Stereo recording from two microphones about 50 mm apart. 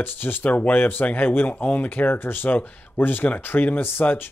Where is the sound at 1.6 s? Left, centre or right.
Left.